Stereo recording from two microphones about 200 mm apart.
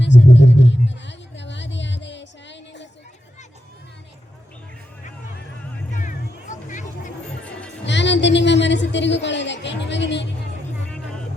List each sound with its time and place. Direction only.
0.0 s a sound: 60° left (ahead or behind)
5.9 s music: 40° left (ahead or behind)
7.9 s music: 60° left (ahead or behind)